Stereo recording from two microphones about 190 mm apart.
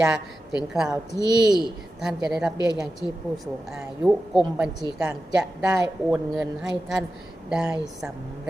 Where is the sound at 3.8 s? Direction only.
Centre (ahead or behind).